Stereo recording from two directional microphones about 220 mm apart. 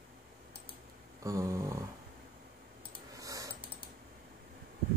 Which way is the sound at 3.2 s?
15° right (ahead or behind).